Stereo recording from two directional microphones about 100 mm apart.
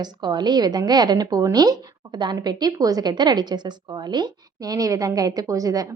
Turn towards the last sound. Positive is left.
turn(degrees=-35)  # may be behind; listen again after turning